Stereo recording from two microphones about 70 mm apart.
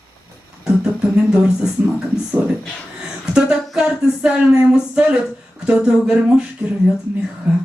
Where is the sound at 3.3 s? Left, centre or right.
Centre.